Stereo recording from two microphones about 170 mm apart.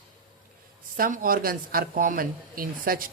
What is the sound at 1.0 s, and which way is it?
A woman's voice, 55° right (ahead or behind).